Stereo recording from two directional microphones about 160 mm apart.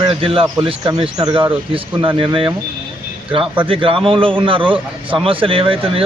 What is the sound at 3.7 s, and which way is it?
Speech, 35° right (ahead or behind).